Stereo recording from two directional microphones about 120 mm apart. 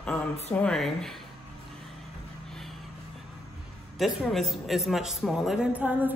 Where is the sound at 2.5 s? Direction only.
5° left (ahead or behind).